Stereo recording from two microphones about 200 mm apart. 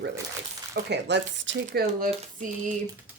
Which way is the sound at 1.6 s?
45° right (ahead or behind).